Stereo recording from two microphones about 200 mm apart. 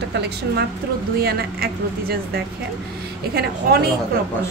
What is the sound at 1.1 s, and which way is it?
Speech, 50° right (ahead or behind).